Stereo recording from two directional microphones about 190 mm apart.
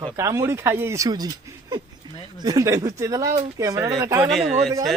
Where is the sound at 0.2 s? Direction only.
15° right (ahead or behind).